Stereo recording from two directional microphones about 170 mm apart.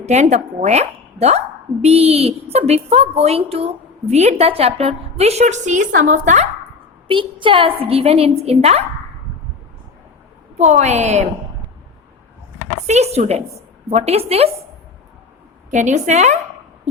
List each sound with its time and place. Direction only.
0.0 s a woman's voice: 40° right (ahead or behind)
7.1 s a woman's voice: 30° right (ahead or behind)
10.6 s a woman's voice: 45° right (ahead or behind)
12.9 s a woman's voice: 40° right (ahead or behind)
15.7 s a woman's voice: 45° right (ahead or behind)